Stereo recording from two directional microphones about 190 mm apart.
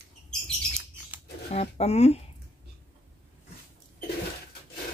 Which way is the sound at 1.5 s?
35° left (ahead or behind).